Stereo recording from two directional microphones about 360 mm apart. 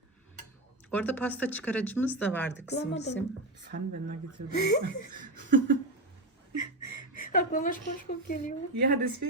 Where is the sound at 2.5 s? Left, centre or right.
Left.